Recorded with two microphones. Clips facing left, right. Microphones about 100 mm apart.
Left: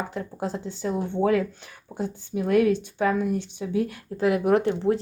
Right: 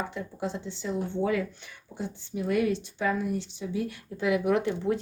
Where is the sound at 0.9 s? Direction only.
60° left (ahead or behind).